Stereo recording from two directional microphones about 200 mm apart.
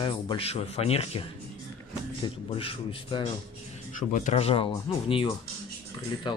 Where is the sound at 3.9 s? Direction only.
40° left (ahead or behind).